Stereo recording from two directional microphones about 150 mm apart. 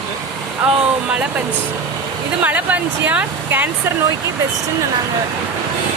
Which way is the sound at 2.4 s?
10° right (ahead or behind).